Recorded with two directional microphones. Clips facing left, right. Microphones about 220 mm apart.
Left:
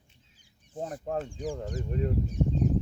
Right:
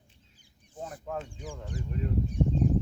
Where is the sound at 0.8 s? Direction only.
35° left (ahead or behind).